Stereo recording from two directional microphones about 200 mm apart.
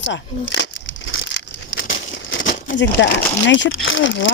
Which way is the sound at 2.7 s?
65° left (ahead or behind).